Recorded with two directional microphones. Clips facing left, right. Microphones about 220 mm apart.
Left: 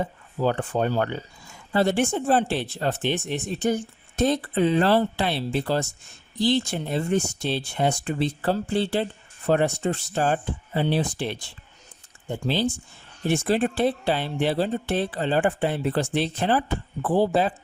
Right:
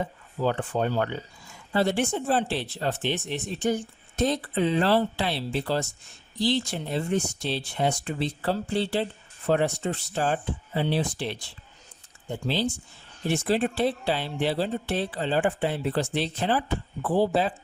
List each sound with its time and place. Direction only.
0.4 s speech: 45° left (ahead or behind)
12.5 s speech: 50° left (ahead or behind)